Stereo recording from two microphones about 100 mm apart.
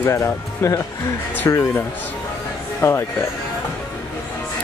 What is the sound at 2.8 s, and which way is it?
Speech, 25° left (ahead or behind).